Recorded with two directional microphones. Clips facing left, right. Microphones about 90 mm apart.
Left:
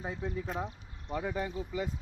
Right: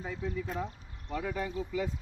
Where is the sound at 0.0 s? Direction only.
30° left (ahead or behind).